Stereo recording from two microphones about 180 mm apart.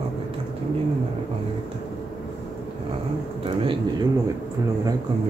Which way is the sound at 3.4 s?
30° right (ahead or behind).